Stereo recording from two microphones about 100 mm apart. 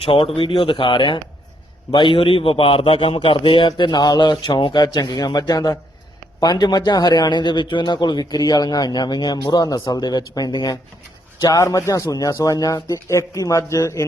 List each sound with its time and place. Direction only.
0.0 s a man's voice: 65° left (ahead or behind); by 14.0 s 35° left (ahead or behind)